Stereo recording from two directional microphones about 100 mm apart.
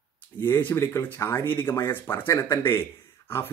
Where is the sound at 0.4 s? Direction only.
20° left (ahead or behind).